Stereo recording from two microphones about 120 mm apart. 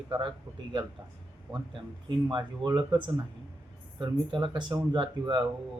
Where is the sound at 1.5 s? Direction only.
45° right (ahead or behind).